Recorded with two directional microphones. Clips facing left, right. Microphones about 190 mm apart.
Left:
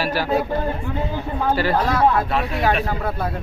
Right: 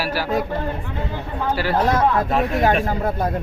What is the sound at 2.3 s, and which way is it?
Speech, 45° right (ahead or behind).